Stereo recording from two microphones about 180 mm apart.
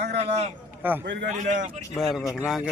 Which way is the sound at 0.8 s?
10° right (ahead or behind).